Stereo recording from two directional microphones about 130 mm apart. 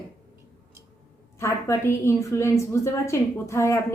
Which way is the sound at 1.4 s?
20° left (ahead or behind).